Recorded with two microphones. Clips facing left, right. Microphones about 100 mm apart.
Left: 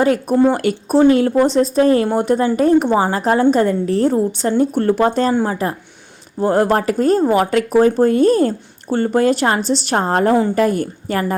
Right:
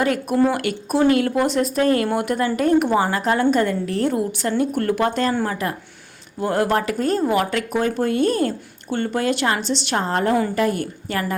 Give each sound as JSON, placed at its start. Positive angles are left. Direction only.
{"t": 0.0, "sound": "speech", "side_deg": 35}
{"t": 5.3, "sound": "speech", "side_deg": 20}
{"t": 6.4, "sound": "speech", "side_deg": 35}